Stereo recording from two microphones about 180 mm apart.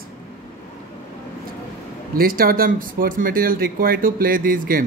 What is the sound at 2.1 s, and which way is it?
Speech, 55° right (ahead or behind).